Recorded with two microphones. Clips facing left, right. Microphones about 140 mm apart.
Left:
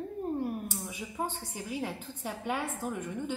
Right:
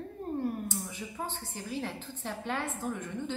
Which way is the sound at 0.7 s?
10° left (ahead or behind).